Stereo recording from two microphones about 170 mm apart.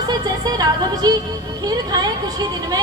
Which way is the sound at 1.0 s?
25° right (ahead or behind).